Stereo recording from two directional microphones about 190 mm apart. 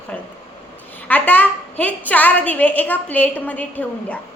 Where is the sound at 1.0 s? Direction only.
10° left (ahead or behind).